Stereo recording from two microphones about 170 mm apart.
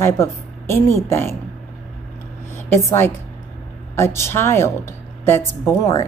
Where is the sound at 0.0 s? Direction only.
15° left (ahead or behind).